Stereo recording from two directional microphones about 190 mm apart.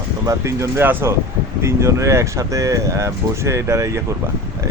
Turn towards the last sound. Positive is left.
turn(degrees=-15)  # may be behind; listen again after turning